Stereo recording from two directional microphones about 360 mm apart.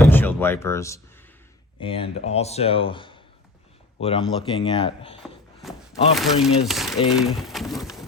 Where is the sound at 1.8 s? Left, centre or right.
Centre.